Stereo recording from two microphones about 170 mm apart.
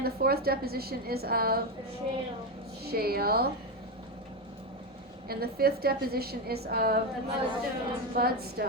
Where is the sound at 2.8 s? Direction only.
65° right (ahead or behind).